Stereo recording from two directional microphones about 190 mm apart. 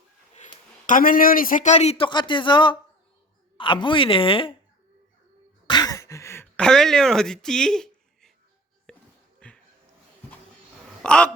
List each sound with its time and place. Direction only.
0.9 s a man's voice: 45° left (ahead or behind); by 4.5 s 25° left (ahead or behind)
5.6 s a sound: 20° left (ahead or behind); by 9.6 s 5° left (ahead or behind)
11.0 s speech: 5° left (ahead or behind)